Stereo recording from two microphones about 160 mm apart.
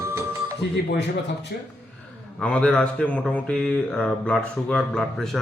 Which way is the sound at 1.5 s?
90° left.